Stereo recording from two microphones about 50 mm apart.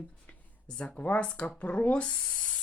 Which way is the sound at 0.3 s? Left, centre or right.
Left.